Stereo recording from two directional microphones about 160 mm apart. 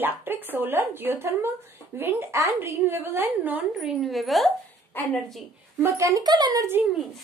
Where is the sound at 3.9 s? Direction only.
Centre (ahead or behind).